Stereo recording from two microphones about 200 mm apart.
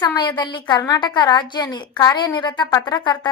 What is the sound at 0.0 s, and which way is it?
A woman's voice, 20° left (ahead or behind).